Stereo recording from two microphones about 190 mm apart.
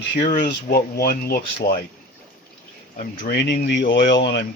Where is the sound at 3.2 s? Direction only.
60° left (ahead or behind).